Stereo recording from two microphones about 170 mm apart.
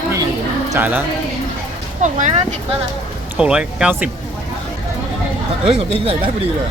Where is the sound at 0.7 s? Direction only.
10° right (ahead or behind).